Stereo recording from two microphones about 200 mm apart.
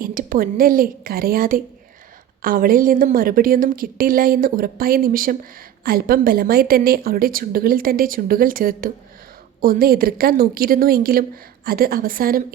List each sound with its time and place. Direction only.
0.0 s a woman's voice: 45° right (ahead or behind)